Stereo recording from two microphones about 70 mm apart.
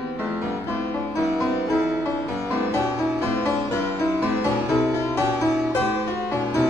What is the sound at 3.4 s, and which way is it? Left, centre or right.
Music, left.